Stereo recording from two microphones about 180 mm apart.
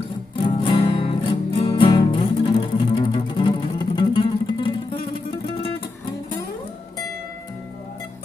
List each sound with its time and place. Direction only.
0.6 s music: 30° left (ahead or behind)